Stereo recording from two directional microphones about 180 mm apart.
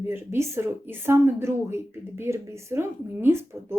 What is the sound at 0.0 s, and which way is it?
Speech, 10° right (ahead or behind).